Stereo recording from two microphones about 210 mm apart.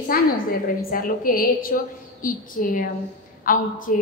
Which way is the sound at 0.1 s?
45° left (ahead or behind).